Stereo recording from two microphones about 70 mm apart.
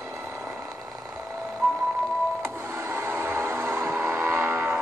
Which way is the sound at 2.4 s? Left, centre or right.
Right.